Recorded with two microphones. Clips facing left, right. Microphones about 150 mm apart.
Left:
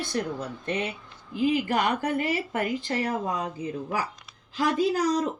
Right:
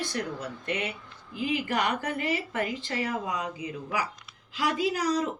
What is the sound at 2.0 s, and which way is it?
Speech, 45° left (ahead or behind).